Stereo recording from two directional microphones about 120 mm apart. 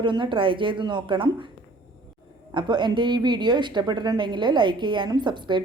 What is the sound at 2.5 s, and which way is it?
A woman's voice, 40° right (ahead or behind).